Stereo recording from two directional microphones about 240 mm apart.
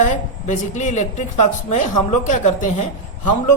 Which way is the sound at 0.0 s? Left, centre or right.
Left.